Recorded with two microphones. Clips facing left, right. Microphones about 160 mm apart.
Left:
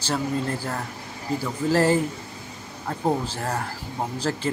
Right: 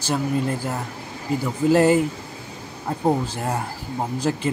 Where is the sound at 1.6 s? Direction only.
15° right (ahead or behind).